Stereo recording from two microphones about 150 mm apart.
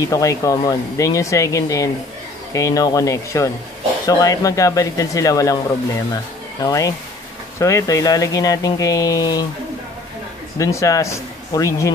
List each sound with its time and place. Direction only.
0.0 s speech: 20° left (ahead or behind)
6.6 s speech: 25° left (ahead or behind)
10.6 s speech: 20° left (ahead or behind)